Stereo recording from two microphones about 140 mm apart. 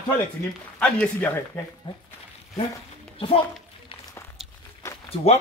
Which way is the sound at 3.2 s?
40° left (ahead or behind).